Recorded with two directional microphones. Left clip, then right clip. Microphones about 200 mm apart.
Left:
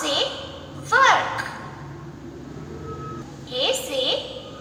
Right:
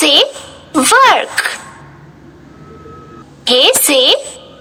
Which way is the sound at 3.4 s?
65° right (ahead or behind).